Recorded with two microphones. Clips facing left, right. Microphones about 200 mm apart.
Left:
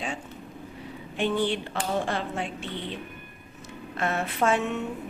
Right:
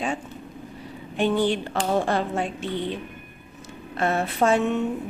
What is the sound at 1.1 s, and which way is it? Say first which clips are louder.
Speech: right 4 dB; 40° right (ahead or behind).